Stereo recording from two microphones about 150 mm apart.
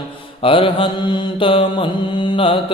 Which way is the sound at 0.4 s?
35° left (ahead or behind).